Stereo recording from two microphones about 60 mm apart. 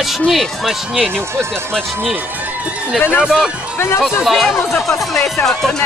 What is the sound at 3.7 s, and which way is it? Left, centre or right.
Speech, left.